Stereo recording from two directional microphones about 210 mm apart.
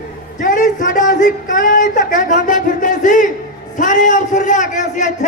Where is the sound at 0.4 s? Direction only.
40° left (ahead or behind).